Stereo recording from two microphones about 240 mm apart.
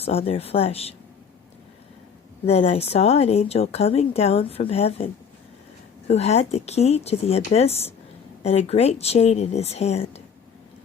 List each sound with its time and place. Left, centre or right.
0.0 s a woman's voice: left
2.5 s a woman's voice: left
6.1 s a woman's voice: left